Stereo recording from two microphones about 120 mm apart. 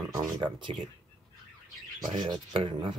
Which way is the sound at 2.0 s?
35° right (ahead or behind).